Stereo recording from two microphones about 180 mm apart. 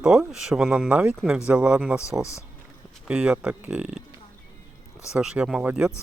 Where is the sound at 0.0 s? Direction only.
5° right (ahead or behind).